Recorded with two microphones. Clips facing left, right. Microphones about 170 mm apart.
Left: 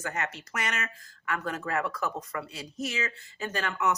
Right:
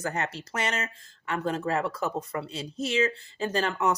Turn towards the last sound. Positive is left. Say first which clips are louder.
# right 3 dB
turn(degrees=-30)  # may be behind; listen again after turning